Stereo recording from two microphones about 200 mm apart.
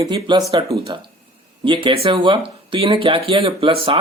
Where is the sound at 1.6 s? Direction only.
25° right (ahead or behind).